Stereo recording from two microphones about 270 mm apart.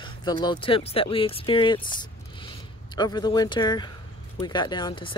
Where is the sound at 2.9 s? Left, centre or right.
Centre.